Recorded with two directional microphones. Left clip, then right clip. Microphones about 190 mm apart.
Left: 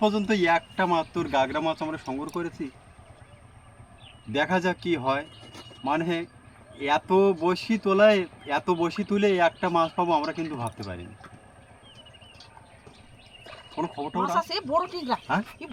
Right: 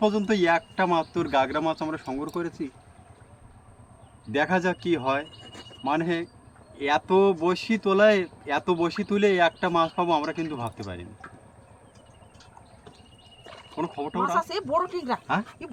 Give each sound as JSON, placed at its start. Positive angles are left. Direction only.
{"t": 0.2, "sound": "speech", "side_deg": 5}
{"t": 4.4, "sound": "speech", "side_deg": 5}
{"t": 13.4, "sound": "a sound", "side_deg": -10}
{"t": 13.7, "sound": "speech", "side_deg": 15}
{"t": 14.5, "sound": "speech", "side_deg": -5}